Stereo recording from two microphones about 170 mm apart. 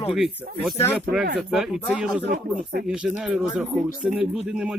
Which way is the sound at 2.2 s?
60° right (ahead or behind).